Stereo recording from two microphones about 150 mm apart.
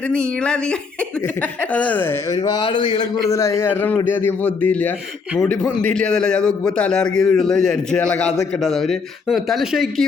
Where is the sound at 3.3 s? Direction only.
20° left (ahead or behind).